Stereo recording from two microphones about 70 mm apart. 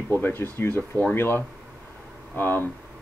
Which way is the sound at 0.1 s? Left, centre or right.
Left.